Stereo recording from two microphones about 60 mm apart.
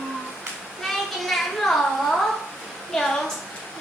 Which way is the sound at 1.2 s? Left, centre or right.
Centre.